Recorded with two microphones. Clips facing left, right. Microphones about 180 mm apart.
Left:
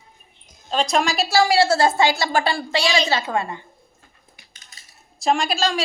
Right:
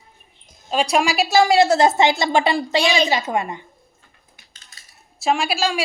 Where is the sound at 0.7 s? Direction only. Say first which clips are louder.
Right 2 dB; 10° right (ahead or behind).